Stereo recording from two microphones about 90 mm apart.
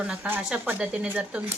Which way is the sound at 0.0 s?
15° right (ahead or behind).